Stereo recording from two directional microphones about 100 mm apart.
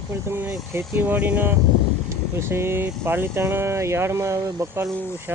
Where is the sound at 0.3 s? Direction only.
25° right (ahead or behind).